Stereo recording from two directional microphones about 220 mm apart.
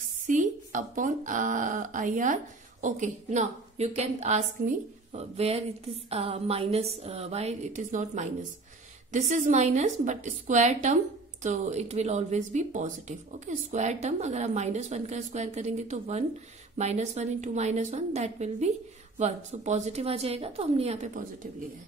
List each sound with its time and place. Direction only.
0.3 s a woman's voice: 35° right (ahead or behind)